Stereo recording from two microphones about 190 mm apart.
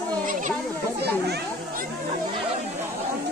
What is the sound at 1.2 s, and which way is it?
Children playing, 60° right (ahead or behind).